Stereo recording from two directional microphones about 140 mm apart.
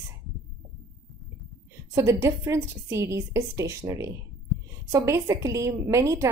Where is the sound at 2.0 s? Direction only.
20° right (ahead or behind).